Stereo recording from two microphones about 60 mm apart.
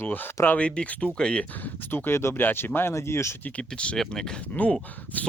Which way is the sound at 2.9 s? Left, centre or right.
Left.